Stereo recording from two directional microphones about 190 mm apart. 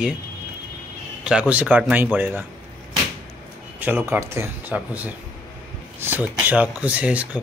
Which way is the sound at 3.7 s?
10° right (ahead or behind).